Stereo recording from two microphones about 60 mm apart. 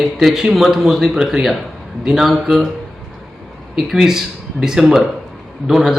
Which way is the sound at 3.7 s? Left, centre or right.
Centre.